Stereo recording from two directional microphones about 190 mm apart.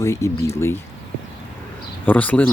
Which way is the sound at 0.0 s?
15° left (ahead or behind).